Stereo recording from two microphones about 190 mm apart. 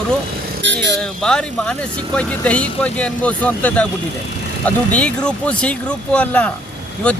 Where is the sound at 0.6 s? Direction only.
70° right (ahead or behind).